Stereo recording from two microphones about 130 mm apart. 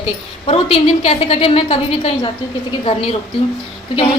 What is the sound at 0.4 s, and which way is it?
Speech, 50° left (ahead or behind).